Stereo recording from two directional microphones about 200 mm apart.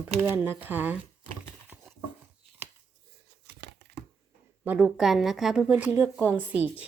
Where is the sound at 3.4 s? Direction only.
55° right (ahead or behind).